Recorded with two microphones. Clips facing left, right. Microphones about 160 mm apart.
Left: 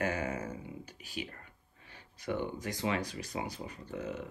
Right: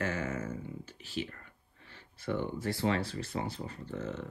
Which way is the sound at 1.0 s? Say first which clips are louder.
Right 4 dB; 15° left (ahead or behind).